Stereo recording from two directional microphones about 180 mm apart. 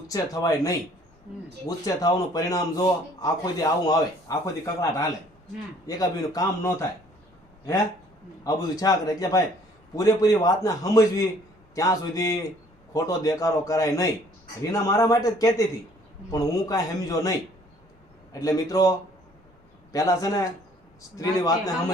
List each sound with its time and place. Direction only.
0.1 s a man's voice: 20° left (ahead or behind)
8.4 s a man's voice: 20° left (ahead or behind)
18.3 s a man's voice: 20° left (ahead or behind)